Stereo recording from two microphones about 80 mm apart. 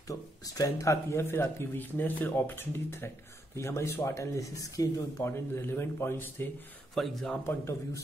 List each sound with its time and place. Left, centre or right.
0.1 s speech: left
5.2 s speech: left
7.0 s speech: centre
7.4 s speech: left